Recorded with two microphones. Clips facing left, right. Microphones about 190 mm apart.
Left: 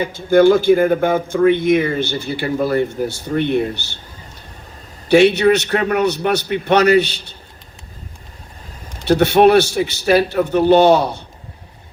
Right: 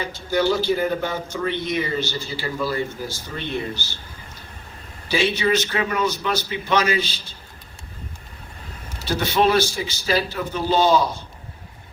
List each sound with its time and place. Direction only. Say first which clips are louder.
0.0 s speech: left 10 dB; 50° left (ahead or behind)
5.0 s a man's voice: left 10 dB; 65° left (ahead or behind)
9.0 s a man's voice: left 9 dB; 65° left (ahead or behind)